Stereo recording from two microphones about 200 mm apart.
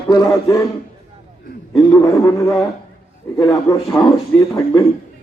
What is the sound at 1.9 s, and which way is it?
Speech, 15° left (ahead or behind).